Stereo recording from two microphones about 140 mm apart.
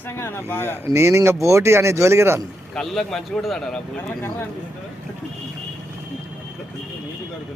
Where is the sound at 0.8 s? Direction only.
20° right (ahead or behind).